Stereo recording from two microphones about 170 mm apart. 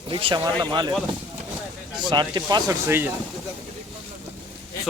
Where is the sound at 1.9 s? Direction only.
25° right (ahead or behind).